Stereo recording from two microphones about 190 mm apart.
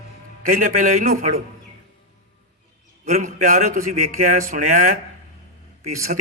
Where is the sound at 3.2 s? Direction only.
45° right (ahead or behind).